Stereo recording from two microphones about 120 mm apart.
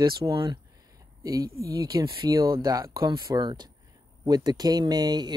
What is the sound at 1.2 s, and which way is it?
Speech, 30° right (ahead or behind).